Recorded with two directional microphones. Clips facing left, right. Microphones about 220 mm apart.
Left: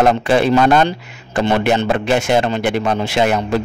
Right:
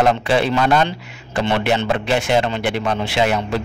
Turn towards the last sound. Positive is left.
turn(degrees=45)  # may be behind; listen again after turning